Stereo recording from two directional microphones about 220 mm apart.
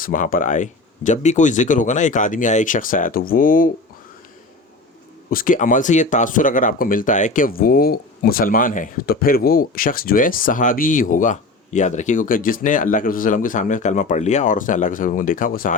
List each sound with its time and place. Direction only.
0.0 s speech: 40° left (ahead or behind)
5.3 s speech: 40° left (ahead or behind)